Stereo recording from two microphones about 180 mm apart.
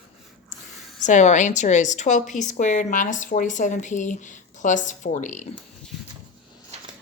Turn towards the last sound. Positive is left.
turn(degrees=40)  # may be behind; listen again after turning